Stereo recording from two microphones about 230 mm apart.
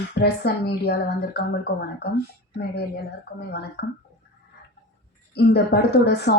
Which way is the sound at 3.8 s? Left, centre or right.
Left.